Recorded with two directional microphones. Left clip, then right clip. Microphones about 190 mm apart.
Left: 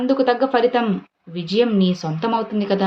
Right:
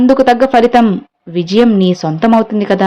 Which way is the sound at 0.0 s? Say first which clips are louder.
Right 9 dB; 45° right (ahead or behind).